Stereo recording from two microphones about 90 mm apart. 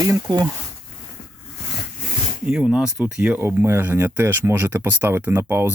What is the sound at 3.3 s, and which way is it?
Speech, 25° right (ahead or behind).